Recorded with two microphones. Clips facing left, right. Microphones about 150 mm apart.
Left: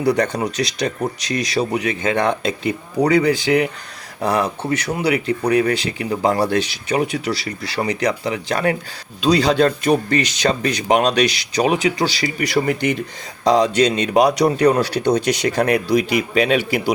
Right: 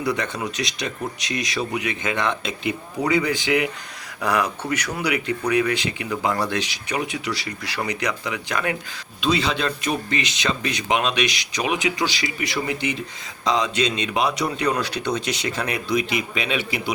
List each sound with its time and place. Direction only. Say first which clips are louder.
0.0 s speech: left 7 dB; 35° left (ahead or behind)
2.1 s speech: left 6 dB; 45° left (ahead or behind)